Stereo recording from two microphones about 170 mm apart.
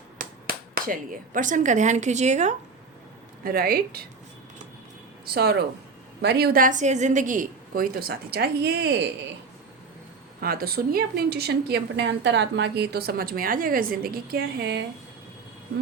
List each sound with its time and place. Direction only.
0.2 s speech: 60° right (ahead or behind); by 2.6 s 45° right (ahead or behind)
3.4 s a woman's voice: 60° right (ahead or behind)
5.2 s a woman's voice: 70° right (ahead or behind); by 9.0 s 85° right
10.4 s speech: 60° right (ahead or behind); by 14.8 s 80° right